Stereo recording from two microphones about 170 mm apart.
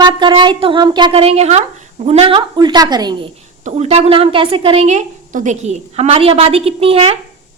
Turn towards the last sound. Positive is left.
turn(degrees=-35)  # may be behind; listen again after turning